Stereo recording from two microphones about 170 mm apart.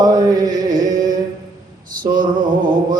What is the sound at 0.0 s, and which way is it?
Chant, 20° right (ahead or behind).